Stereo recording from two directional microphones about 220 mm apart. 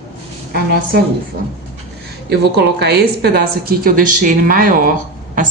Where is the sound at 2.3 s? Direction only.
50° right (ahead or behind).